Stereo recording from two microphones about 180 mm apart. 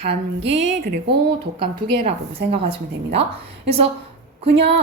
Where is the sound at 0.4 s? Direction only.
70° right (ahead or behind).